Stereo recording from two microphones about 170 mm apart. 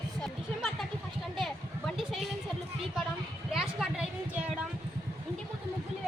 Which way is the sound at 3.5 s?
Centre (ahead or behind).